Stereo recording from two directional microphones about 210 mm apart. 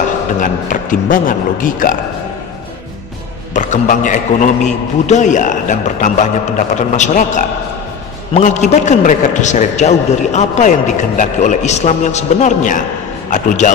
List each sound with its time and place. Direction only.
0.4 s a man's voice: 40° left (ahead or behind)
3.5 s a man's voice: 35° left (ahead or behind)